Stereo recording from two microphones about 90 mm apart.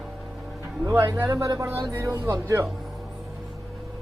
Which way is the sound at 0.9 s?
40° right (ahead or behind).